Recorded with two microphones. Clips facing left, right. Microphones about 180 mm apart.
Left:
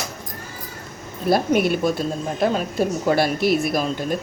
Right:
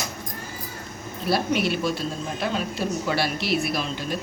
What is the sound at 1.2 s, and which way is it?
A woman's voice, 50° left (ahead or behind).